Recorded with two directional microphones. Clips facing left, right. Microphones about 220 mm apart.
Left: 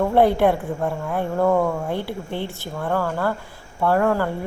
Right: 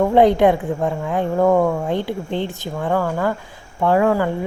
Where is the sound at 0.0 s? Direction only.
15° right (ahead or behind).